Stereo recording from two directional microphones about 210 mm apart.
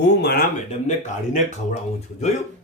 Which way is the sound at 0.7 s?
35° left (ahead or behind).